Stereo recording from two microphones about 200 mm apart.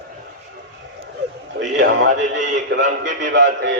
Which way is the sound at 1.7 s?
65° right (ahead or behind).